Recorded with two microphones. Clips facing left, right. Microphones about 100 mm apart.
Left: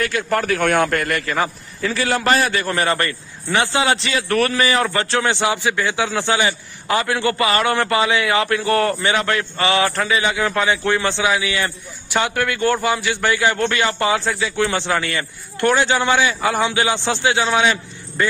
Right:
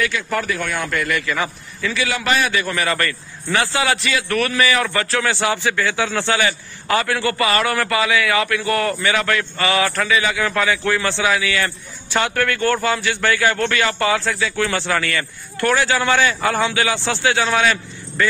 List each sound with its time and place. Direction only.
0.0 s a man's voice: 50° left (ahead or behind); by 18.2 s 20° left (ahead or behind)